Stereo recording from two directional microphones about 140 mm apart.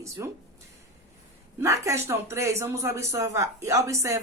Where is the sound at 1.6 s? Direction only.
20° right (ahead or behind).